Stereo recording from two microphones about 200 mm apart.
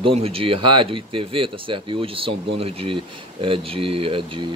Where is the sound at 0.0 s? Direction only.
30° right (ahead or behind).